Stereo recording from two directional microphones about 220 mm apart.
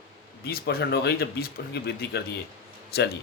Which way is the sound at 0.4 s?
45° left (ahead or behind).